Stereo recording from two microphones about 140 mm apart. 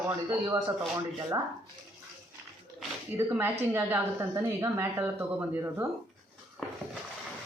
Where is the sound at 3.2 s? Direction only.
20° right (ahead or behind).